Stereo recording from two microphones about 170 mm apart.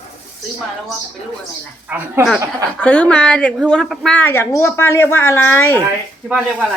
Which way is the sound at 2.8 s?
10° left (ahead or behind).